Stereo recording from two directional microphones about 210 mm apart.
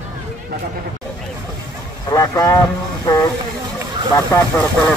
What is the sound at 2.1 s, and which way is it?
Speech, 15° left (ahead or behind).